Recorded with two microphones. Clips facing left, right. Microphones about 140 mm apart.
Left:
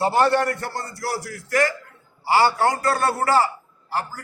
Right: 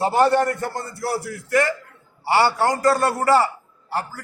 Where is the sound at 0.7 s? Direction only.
25° right (ahead or behind).